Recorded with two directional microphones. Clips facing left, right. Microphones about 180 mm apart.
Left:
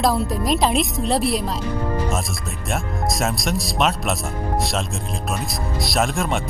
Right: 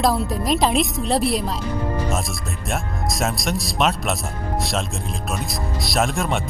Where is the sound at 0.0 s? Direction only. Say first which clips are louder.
Even; centre (ahead or behind).